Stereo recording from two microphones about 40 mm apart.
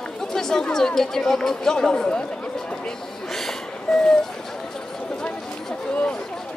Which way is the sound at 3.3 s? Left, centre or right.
Centre.